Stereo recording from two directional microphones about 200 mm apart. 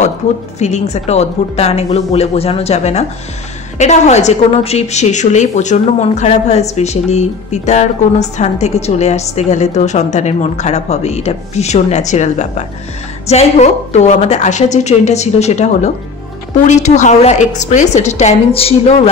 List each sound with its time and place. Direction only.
0.6 s a woman's voice: 35° left (ahead or behind)